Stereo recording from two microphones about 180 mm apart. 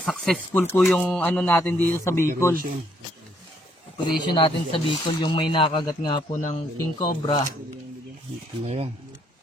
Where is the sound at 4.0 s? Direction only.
25° left (ahead or behind).